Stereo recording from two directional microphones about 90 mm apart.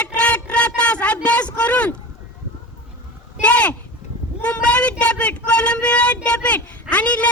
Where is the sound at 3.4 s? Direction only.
15° left (ahead or behind).